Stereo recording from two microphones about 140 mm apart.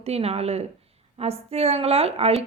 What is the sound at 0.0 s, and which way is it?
A woman's voice, 45° right (ahead or behind).